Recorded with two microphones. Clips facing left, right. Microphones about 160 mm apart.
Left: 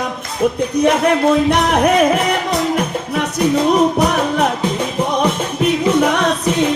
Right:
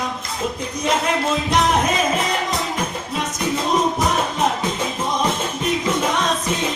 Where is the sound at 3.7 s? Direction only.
65° left (ahead or behind).